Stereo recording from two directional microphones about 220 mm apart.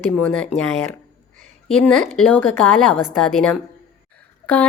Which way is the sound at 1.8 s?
5° left (ahead or behind).